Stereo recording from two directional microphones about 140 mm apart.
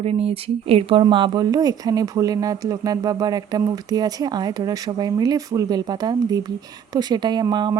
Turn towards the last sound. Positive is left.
turn(degrees=-30)  # may be behind; listen again after turning